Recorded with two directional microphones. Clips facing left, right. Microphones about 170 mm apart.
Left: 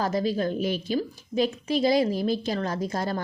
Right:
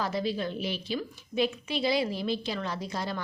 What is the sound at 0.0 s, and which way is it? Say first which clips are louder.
A woman's voice: left 5 dB; 45° left (ahead or behind).